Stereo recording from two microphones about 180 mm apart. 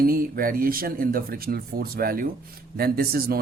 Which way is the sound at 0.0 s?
55° right (ahead or behind).